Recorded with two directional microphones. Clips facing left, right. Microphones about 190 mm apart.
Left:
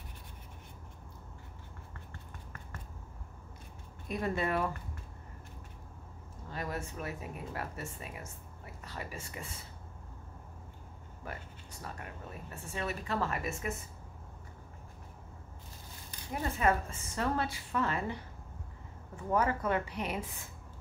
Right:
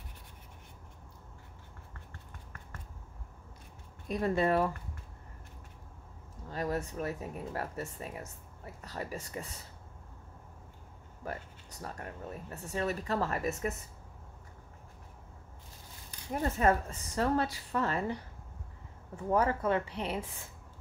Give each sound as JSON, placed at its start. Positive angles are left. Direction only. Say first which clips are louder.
{"t": 4.1, "sound": "speech", "louder": "right 4 dB", "side_deg": -35}
{"t": 6.5, "sound": "speech", "louder": "right 5 dB", "side_deg": -35}
{"t": 11.2, "sound": "speech", "louder": "right 4 dB", "side_deg": -40}
{"t": 16.3, "sound": "speech", "louder": "right 2 dB", "side_deg": -40}